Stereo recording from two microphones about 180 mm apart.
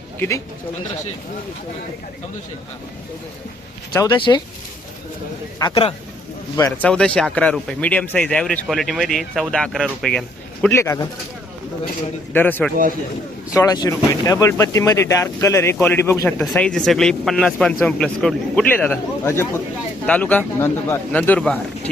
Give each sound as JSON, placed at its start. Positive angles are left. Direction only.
{"t": 0.2, "sound": "speech", "side_deg": 15}
{"t": 4.2, "sound": "speech", "side_deg": 25}
{"t": 5.5, "sound": "speech", "side_deg": 25}
{"t": 6.7, "sound": "speech", "side_deg": 5}
{"t": 12.3, "sound": "speech", "side_deg": 10}
{"t": 16.4, "sound": "speech", "side_deg": 5}